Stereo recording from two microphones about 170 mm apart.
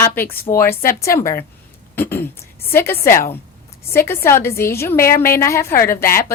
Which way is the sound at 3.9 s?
15° left (ahead or behind).